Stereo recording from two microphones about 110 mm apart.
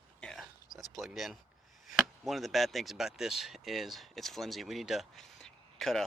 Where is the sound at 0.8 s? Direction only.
Centre (ahead or behind).